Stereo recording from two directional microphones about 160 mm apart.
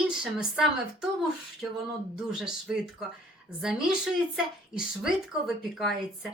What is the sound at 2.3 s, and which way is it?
Speech, 5° right (ahead or behind).